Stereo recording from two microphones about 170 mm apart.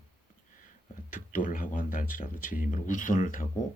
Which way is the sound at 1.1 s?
50° left (ahead or behind).